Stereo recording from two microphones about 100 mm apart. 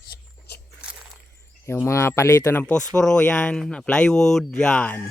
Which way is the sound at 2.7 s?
5° left (ahead or behind).